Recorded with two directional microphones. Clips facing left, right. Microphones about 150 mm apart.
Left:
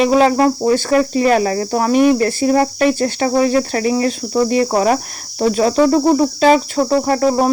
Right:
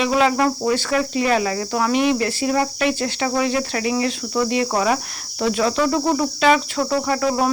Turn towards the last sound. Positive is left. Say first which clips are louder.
# left 5 dB
turn(degrees=40)  # may be behind; listen again after turning